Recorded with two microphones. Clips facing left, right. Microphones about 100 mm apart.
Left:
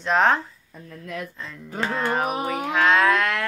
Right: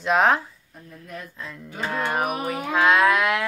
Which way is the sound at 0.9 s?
90° left.